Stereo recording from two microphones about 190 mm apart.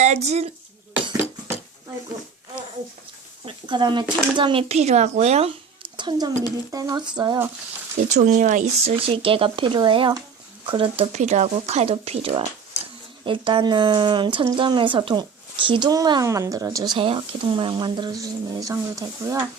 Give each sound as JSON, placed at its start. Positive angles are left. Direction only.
{"t": 0.0, "sound": "a child's voice", "side_deg": -35}
{"t": 1.2, "sound": "a sound", "side_deg": 30}
{"t": 3.4, "sound": "speech", "side_deg": -25}
{"t": 6.0, "sound": "a child's voice", "side_deg": -25}
{"t": 8.1, "sound": "a woman's voice", "side_deg": -40}